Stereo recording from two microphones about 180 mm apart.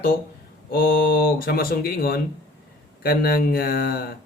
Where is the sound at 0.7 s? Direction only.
55° left (ahead or behind).